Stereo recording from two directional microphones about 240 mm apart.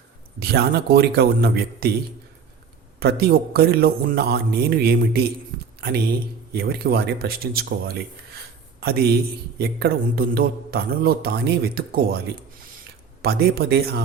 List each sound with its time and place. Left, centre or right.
0.3 s a man's voice: right
3.0 s a man's voice: right
6.5 s a man's voice: right
13.2 s a man's voice: right